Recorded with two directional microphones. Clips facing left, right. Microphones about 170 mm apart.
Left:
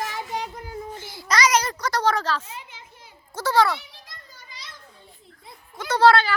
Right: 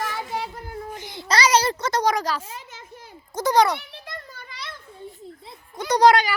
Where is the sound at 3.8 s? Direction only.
65° right (ahead or behind).